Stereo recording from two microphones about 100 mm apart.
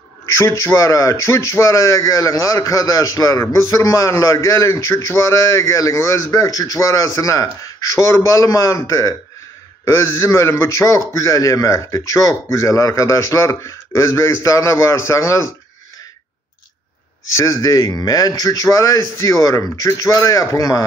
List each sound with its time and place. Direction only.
0.4 s a man's voice: 25° left (ahead or behind)
17.4 s speech: 35° left (ahead or behind)